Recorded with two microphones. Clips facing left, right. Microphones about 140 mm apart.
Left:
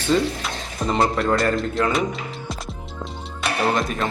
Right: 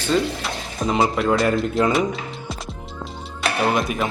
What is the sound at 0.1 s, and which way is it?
Speech, centre (ahead or behind).